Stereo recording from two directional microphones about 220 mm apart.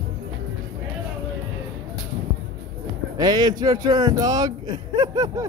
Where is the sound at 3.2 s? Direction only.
20° right (ahead or behind).